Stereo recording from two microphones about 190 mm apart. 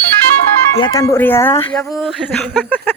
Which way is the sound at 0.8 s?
20° left (ahead or behind).